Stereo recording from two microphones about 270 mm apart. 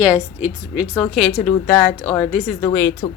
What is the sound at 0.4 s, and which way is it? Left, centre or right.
A woman's voice, centre.